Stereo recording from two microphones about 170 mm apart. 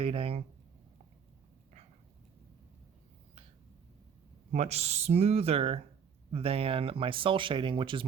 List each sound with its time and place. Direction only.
0.0 s speech: 35° right (ahead or behind)
4.5 s speech: 40° right (ahead or behind)